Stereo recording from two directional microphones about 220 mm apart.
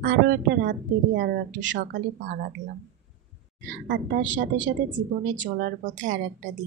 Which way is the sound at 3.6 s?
40° right (ahead or behind).